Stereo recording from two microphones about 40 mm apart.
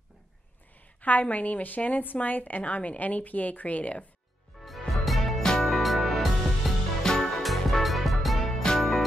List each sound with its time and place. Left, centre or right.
1.0 s a woman's voice: left
4.6 s music: centre
5.4 s music: centre
5.7 s music: centre
7.0 s music: centre
7.4 s music: centre